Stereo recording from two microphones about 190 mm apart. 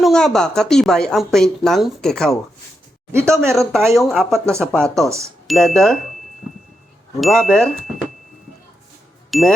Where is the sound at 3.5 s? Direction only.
Centre (ahead or behind).